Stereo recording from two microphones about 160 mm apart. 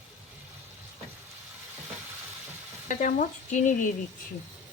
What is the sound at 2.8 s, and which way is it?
Speech, 50° left (ahead or behind).